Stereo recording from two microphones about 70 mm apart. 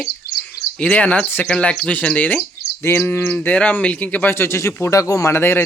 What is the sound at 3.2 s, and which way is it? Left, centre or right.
Speech, left.